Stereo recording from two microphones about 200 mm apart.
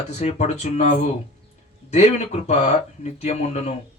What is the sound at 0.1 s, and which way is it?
Speech, 35° left (ahead or behind).